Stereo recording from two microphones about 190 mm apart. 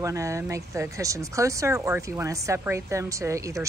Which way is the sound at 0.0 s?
15° right (ahead or behind).